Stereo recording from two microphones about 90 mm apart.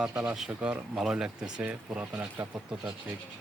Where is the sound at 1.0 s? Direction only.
5° right (ahead or behind).